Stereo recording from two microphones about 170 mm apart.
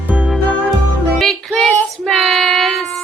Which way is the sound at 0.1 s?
5° right (ahead or behind).